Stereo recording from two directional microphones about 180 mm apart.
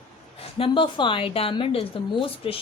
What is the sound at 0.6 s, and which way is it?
A woman's voice, 25° left (ahead or behind).